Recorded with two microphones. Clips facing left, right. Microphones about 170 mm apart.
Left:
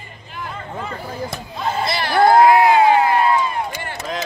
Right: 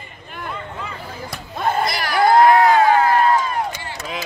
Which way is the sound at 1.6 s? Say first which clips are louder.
Right 2 dB; 55° right (ahead or behind).